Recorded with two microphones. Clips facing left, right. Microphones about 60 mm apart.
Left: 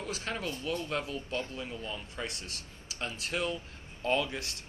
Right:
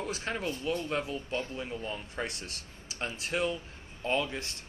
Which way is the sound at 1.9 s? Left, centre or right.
Right.